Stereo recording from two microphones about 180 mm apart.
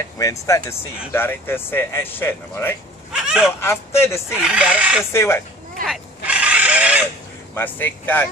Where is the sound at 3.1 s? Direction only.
5° right (ahead or behind).